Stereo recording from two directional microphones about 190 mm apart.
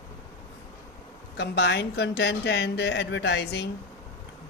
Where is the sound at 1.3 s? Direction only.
60° left (ahead or behind).